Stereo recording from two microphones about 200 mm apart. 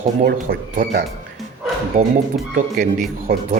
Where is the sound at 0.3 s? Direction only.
45° right (ahead or behind).